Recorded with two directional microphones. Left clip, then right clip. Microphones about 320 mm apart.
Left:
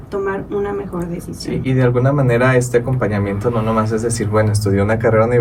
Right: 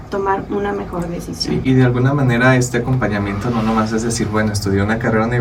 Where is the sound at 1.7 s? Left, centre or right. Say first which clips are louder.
Left 1 dB; centre.